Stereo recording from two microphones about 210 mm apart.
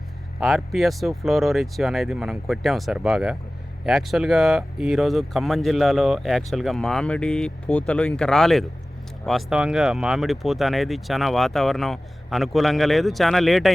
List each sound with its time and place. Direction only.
0.3 s speech: centre (ahead or behind)